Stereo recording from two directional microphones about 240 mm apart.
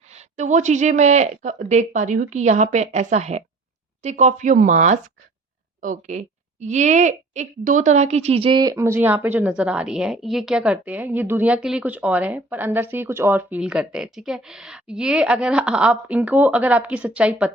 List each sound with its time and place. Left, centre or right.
0.1 s a woman's voice: right; by 17.5 s centre